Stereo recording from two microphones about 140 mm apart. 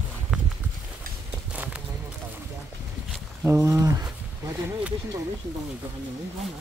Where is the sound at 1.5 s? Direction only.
10° right (ahead or behind).